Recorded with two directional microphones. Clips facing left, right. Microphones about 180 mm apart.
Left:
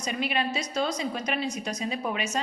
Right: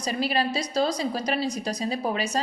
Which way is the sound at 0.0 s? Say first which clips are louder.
Right 3 dB; 35° right (ahead or behind).